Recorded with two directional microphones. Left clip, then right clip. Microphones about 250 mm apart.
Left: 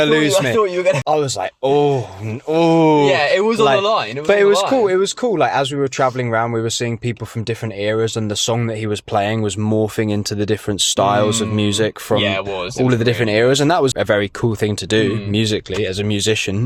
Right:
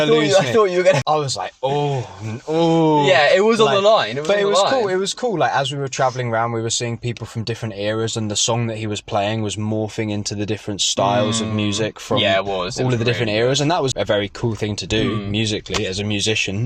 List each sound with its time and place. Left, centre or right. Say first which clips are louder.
0.0 s speech: left 1 dB; left
0.5 s speech: right 1 dB; centre
1.0 s speech: left 2 dB; left
3.0 s speech: right 1 dB; centre
4.3 s speech: left 4 dB; left
12.1 s speech: right 2 dB; centre
12.9 s speech: left 4 dB; left